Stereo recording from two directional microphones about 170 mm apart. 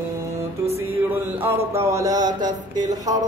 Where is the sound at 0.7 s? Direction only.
10° right (ahead or behind).